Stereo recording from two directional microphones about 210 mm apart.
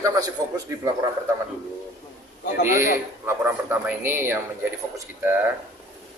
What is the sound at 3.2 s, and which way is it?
Speech, 10° right (ahead or behind).